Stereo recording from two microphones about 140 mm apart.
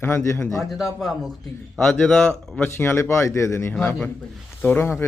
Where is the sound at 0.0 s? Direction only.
15° left (ahead or behind).